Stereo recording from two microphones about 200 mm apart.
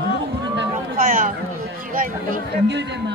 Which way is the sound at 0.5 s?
45° right (ahead or behind).